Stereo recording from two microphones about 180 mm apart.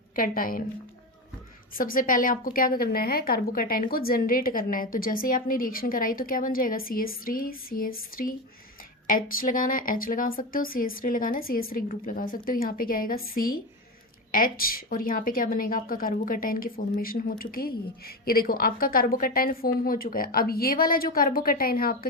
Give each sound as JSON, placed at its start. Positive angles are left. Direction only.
{"t": 0.2, "sound": "a woman's voice", "side_deg": 50}
{"t": 1.7, "sound": "a woman's voice", "side_deg": 50}